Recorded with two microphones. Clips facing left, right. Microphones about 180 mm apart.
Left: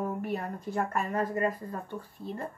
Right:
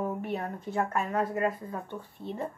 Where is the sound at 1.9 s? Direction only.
65° right (ahead or behind).